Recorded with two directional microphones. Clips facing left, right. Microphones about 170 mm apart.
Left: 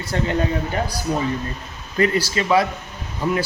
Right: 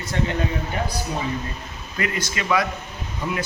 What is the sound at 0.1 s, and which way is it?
Speech, 35° left (ahead or behind).